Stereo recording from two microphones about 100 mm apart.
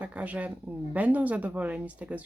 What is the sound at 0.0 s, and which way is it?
Speech, 15° right (ahead or behind).